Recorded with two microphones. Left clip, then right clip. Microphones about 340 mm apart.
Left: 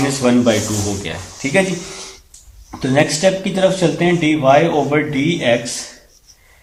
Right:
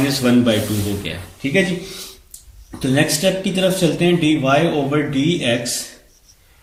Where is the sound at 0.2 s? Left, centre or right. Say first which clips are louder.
Left 2 dB; centre.